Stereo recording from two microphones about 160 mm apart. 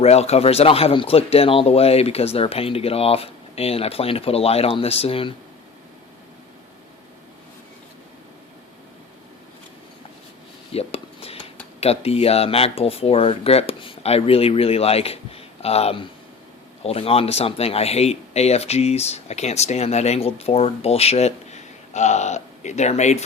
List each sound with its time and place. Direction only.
0.0 s speech: 40° left (ahead or behind)
10.7 s a sound: 40° left (ahead or behind)
11.8 s speech: 40° left (ahead or behind)